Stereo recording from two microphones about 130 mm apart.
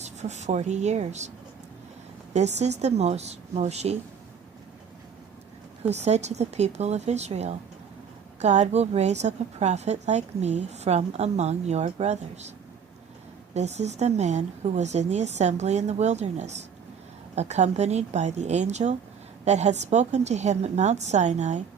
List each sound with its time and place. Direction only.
0.0 s a woman's voice: 60° right (ahead or behind)
2.3 s a woman's voice: 60° right (ahead or behind)
5.8 s a woman's voice: 60° right (ahead or behind)
13.5 s a woman's voice: 60° right (ahead or behind)